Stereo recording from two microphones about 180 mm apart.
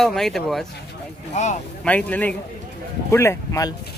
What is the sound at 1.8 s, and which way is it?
Speech, 10° left (ahead or behind).